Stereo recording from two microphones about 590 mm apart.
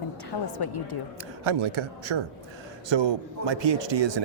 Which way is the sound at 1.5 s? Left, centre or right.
Right.